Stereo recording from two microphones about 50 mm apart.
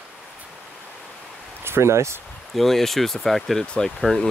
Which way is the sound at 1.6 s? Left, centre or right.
Right.